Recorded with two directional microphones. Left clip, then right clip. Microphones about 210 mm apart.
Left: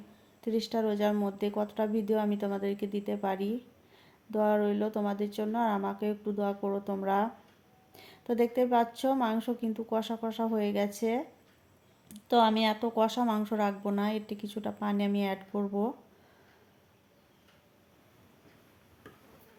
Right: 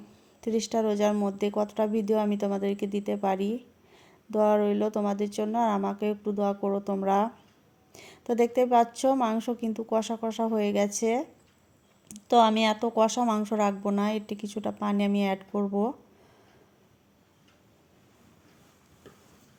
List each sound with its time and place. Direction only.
0.4 s speech: 25° right (ahead or behind)